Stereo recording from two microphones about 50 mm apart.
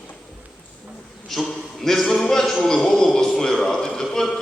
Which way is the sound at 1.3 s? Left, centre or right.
Centre.